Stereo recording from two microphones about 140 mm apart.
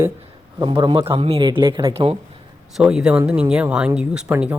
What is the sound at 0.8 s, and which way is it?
Speech, 40° right (ahead or behind).